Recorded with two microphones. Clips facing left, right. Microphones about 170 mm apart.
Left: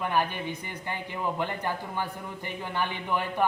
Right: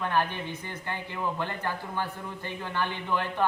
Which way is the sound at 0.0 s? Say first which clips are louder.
Even; 10° left (ahead or behind).